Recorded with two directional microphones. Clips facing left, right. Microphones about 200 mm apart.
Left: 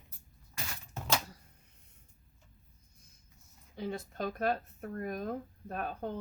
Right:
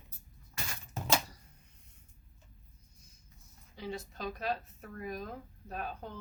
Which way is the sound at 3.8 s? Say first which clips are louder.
Left 4 dB; 55° left (ahead or behind).